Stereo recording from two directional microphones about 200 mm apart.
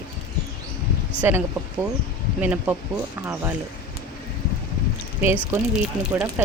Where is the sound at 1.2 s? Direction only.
10° right (ahead or behind).